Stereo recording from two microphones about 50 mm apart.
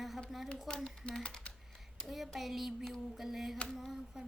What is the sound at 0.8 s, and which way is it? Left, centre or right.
Speech, centre.